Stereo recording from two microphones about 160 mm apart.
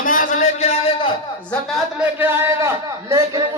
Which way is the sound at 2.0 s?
10° right (ahead or behind).